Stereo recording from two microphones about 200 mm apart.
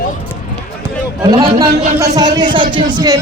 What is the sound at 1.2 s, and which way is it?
Speech, 20° right (ahead or behind).